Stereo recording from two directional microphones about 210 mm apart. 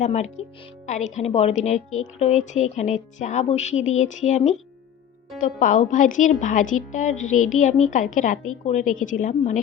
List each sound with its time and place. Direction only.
0.0 s a woman's voice: 35° left (ahead or behind)